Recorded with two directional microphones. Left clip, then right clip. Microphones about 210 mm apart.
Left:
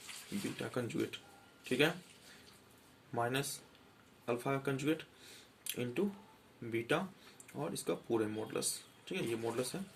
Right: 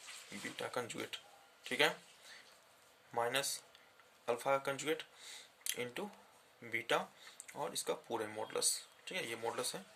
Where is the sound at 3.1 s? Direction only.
35° right (ahead or behind).